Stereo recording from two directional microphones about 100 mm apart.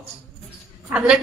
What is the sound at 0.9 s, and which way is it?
Speech, 10° right (ahead or behind).